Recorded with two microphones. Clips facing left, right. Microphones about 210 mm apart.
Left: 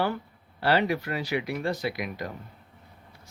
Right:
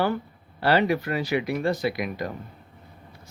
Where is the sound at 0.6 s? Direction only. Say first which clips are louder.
Right 3 dB; 50° right (ahead or behind).